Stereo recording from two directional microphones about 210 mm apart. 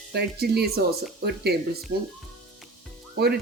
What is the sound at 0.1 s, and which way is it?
Speech, 50° right (ahead or behind).